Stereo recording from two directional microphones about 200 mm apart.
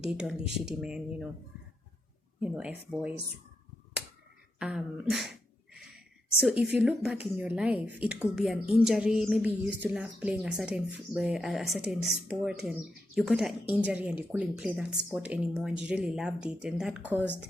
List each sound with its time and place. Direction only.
0.0 s speech: 5° right (ahead or behind)
2.4 s speech: 5° right (ahead or behind)
4.6 s speech: 5° right (ahead or behind)
6.7 s speech: 5° right (ahead or behind)
17.2 s speech: 10° left (ahead or behind)